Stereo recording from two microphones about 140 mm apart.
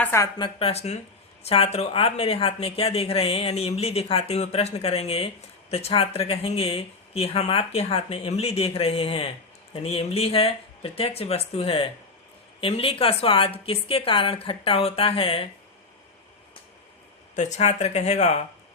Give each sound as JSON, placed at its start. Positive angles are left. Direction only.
{"t": 0.0, "sound": "speech", "side_deg": 20}
{"t": 0.3, "sound": "a woman's voice", "side_deg": 35}
{"t": 0.7, "sound": "a woman's voice", "side_deg": 50}
{"t": 17.3, "sound": "speech", "side_deg": 55}